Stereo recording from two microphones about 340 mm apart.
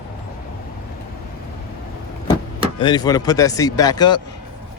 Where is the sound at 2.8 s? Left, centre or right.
Centre.